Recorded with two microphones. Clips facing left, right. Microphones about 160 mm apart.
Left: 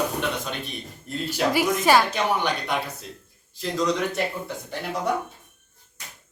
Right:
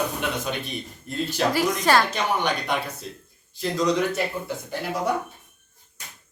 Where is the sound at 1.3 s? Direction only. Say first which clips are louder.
Left 1 dB; 5° left (ahead or behind).